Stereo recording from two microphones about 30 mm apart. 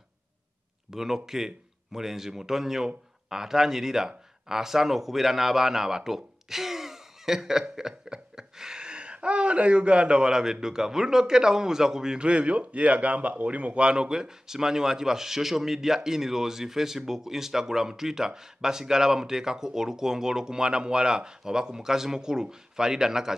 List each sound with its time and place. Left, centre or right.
0.9 s a man's voice: centre; by 10.3 s right
10.3 s a man's voice: centre
12.2 s speech: right
13.7 s speech: right